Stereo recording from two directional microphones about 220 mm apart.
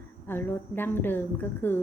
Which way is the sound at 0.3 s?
10° left (ahead or behind).